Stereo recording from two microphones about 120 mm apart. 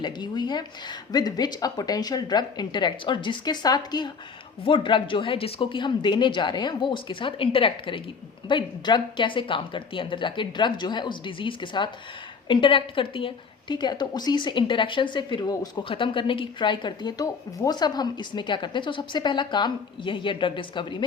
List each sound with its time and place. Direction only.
0.0 s a woman's voice: 40° left (ahead or behind)
15.8 s a woman's voice: 45° left (ahead or behind)